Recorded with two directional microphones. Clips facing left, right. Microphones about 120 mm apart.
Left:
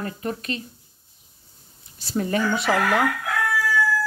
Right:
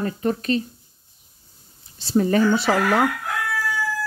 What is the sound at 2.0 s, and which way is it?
Speech, 30° right (ahead or behind).